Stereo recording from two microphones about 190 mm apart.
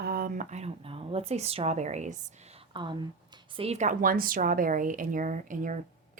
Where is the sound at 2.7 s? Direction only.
25° right (ahead or behind).